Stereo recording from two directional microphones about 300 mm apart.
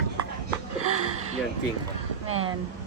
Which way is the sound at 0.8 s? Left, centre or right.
Right.